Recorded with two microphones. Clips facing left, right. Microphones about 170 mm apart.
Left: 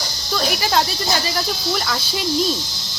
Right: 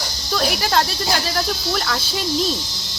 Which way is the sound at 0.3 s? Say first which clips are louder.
Even; centre (ahead or behind).